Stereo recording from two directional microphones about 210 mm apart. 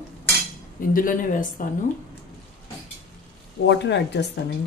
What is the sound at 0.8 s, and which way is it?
Speech, 40° left (ahead or behind).